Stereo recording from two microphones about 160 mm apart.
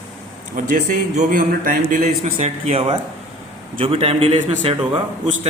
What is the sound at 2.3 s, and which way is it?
A man's voice, 40° right (ahead or behind).